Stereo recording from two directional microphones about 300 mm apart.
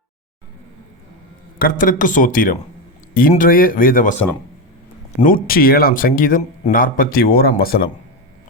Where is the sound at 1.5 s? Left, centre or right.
Left.